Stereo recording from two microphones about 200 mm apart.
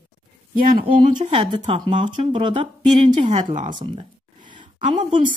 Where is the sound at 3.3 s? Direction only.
40° right (ahead or behind).